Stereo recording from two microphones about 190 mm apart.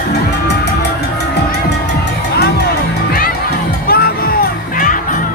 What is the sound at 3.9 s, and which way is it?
Music, 55° left (ahead or behind).